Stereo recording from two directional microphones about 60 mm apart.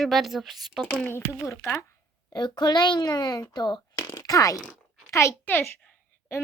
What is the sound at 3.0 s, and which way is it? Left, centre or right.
Speech, left.